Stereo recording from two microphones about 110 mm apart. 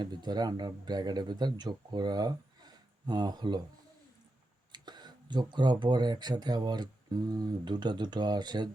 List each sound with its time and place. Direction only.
0.0 s speech: 40° right (ahead or behind)
4.7 s speech: 40° right (ahead or behind)